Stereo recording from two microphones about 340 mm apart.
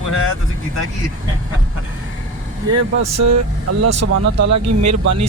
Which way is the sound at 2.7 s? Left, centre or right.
Right.